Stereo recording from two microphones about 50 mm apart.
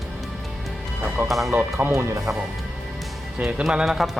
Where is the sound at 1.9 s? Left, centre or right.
Right.